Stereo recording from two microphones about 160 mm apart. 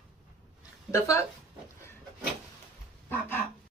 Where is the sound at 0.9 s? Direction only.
20° left (ahead or behind).